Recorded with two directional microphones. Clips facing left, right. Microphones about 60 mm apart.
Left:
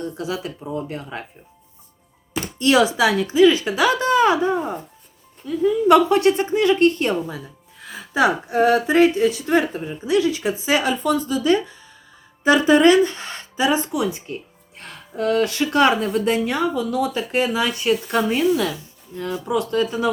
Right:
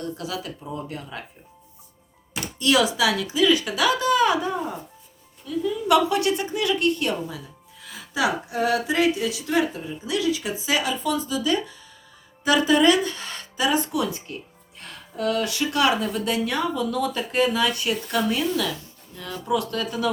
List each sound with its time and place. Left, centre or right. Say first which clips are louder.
0.2 s speech: left 4 dB; left
2.4 s a woman's voice: left 4 dB; left
14.8 s speech: left 4 dB; left
16.7 s speech: left 3 dB; centre